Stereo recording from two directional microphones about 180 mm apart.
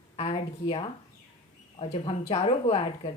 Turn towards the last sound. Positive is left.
turn(degrees=30)  # may be behind; listen again after turning